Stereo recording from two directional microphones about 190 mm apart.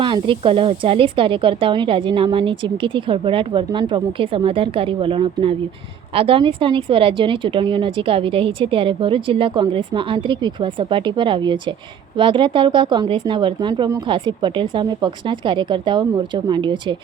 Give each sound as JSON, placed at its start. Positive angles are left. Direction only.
{"t": 0.0, "sound": "speech", "side_deg": -25}